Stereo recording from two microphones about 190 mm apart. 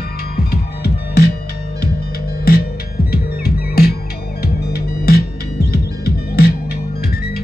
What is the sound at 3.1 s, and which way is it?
Music, 55° left (ahead or behind).